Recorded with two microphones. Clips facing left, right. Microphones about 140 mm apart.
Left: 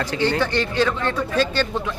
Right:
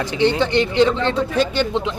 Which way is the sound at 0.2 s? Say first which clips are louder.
Right 5 dB; 20° right (ahead or behind).